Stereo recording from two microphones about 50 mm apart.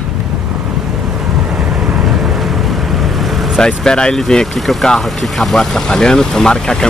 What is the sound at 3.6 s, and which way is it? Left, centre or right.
Speech, centre.